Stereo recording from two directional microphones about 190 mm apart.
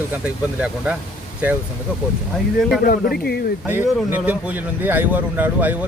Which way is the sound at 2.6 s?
Centre (ahead or behind).